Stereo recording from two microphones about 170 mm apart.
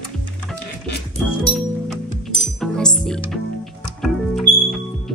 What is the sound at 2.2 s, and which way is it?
Music, centre (ahead or behind).